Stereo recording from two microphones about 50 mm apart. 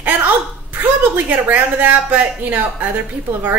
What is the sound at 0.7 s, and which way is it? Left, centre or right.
A woman's voice, right.